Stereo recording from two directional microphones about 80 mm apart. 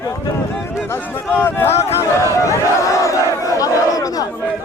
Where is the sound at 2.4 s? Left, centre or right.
Left.